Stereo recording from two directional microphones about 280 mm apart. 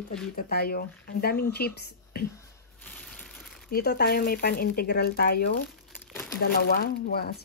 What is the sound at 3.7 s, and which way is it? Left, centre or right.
Speech, left.